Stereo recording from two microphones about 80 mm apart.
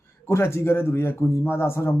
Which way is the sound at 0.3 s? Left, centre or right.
Left.